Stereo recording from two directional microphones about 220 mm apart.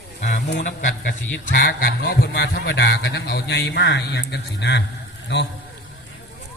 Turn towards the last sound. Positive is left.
turn(degrees=50)  # may be behind; listen again after turning